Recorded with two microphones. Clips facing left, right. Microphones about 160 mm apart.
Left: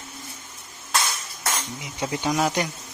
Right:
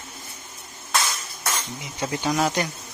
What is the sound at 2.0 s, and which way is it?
Speech, 5° left (ahead or behind).